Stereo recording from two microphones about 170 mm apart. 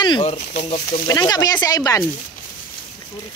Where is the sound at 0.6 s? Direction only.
35° left (ahead or behind).